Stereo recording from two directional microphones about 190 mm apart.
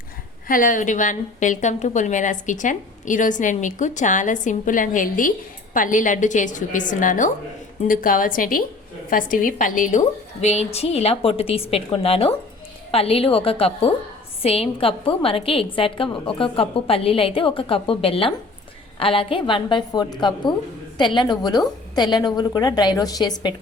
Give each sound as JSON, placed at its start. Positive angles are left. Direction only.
{"t": 0.4, "sound": "a woman's voice", "side_deg": 45}